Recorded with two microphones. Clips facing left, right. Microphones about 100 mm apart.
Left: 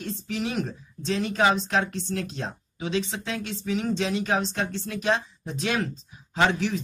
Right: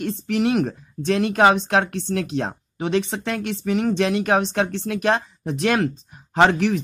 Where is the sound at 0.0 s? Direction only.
65° right (ahead or behind).